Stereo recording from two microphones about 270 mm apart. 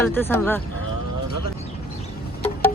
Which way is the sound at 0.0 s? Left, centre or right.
Centre.